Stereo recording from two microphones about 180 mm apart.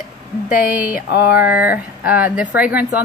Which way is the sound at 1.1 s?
65° left (ahead or behind).